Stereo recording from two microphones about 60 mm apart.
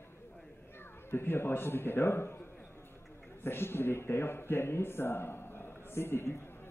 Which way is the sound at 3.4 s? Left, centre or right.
Left.